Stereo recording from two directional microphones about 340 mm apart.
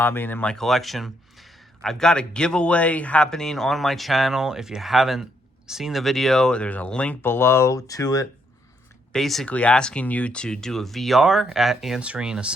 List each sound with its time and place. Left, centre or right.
0.0 s speech: centre